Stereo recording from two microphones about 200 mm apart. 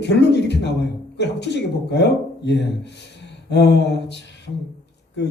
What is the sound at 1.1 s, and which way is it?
A man's voice, 60° left (ahead or behind).